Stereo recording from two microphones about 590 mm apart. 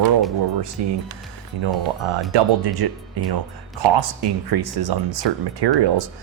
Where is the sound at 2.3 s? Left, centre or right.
Right.